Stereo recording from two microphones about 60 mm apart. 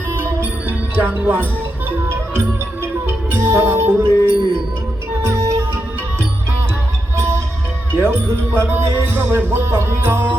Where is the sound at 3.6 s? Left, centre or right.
Right.